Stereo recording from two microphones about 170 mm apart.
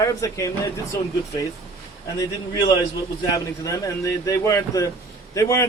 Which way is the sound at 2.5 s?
25° left (ahead or behind).